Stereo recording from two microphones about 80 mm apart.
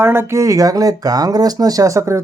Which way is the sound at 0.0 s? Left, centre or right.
Right.